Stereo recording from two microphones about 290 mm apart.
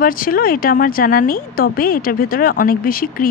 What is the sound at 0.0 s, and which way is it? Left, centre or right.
Speech, left.